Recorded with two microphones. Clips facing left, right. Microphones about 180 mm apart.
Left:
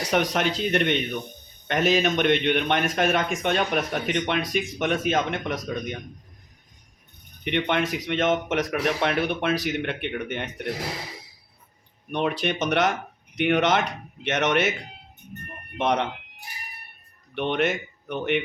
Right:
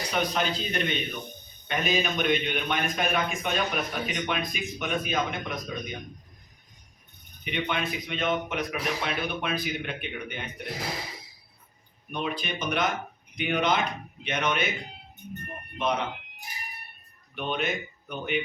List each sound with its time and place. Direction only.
0.0 s speech: 90° left
7.4 s speech: 70° left (ahead or behind)
12.1 s speech: 75° left (ahead or behind)
15.8 s speech: 80° left
17.3 s speech: 75° left (ahead or behind)